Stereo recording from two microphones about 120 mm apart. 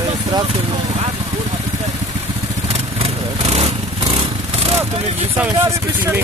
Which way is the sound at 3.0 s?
60° right (ahead or behind).